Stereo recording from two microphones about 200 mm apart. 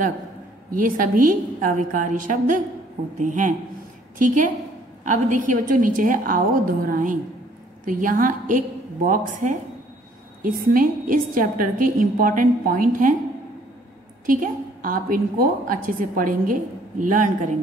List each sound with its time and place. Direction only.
0.7 s a woman's voice: 45° right (ahead or behind)
14.2 s a woman's voice: 45° right (ahead or behind)